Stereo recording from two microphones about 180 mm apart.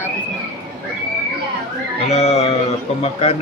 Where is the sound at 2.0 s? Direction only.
35° left (ahead or behind).